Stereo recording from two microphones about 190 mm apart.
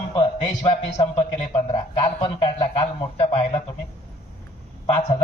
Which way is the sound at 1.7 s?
25° left (ahead or behind).